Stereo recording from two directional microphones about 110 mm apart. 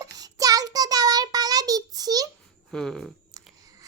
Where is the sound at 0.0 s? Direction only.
30° right (ahead or behind).